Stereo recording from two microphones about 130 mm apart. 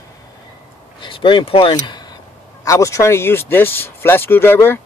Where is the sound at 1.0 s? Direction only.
40° left (ahead or behind).